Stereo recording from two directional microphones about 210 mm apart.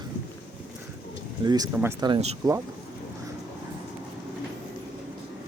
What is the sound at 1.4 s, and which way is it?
Speech, 20° right (ahead or behind).